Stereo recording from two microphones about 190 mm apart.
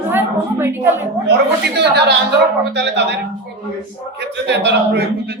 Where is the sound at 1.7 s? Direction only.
60° right (ahead or behind).